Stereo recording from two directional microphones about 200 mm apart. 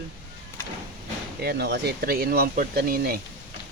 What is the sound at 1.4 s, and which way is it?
Speech, 55° right (ahead or behind).